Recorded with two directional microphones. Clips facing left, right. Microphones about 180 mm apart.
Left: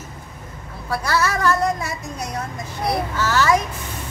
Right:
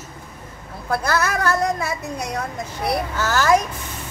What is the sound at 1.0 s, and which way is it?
Music, 65° right (ahead or behind).